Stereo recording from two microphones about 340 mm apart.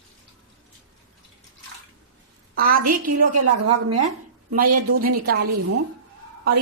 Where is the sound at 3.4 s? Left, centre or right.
Right.